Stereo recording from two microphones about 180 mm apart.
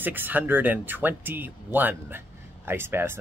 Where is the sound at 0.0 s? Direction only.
10° right (ahead or behind).